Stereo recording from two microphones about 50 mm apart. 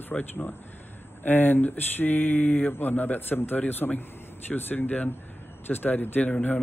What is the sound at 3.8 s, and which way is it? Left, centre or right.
Speech, left.